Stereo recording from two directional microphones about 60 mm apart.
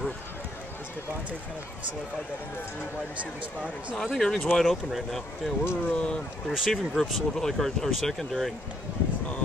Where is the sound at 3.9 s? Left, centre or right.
Centre.